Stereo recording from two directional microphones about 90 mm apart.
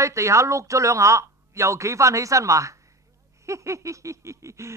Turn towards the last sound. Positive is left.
turn(degrees=-35)  # may be behind; listen again after turning